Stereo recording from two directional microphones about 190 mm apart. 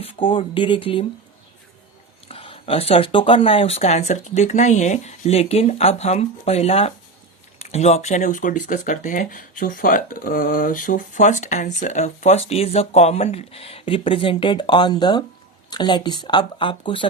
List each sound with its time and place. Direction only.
0.0 s speech: 25° left (ahead or behind)
2.2 s speech: 30° left (ahead or behind)